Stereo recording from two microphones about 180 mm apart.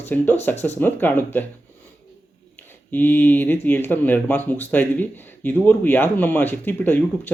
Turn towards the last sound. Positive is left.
turn(degrees=10)  # may be behind; listen again after turning